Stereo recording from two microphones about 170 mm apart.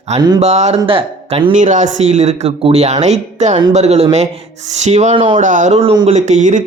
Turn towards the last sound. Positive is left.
turn(degrees=-45)  # may be behind; listen again after turning